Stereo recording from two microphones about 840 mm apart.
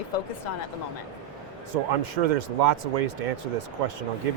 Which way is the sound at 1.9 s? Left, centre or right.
Right.